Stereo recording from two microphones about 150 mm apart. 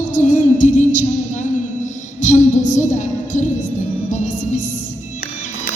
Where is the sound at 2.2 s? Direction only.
55° left (ahead or behind).